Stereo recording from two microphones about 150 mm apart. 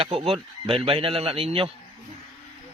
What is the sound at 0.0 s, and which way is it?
Speech, 40° right (ahead or behind).